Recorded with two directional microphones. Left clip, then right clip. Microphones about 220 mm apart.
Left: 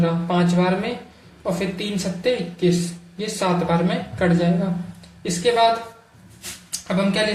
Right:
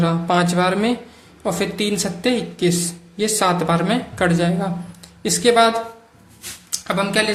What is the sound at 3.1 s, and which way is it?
Speech, 35° right (ahead or behind).